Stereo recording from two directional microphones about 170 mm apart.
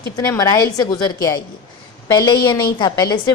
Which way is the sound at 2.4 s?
25° left (ahead or behind).